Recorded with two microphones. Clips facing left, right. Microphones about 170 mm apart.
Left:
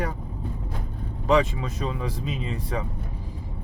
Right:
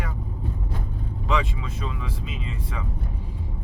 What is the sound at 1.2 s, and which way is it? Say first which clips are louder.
Speech: left 6 dB; 40° left (ahead or behind).